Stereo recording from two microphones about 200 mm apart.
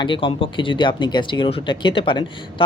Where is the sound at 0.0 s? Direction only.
25° left (ahead or behind).